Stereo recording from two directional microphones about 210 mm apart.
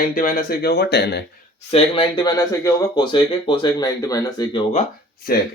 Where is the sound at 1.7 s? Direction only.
25° left (ahead or behind).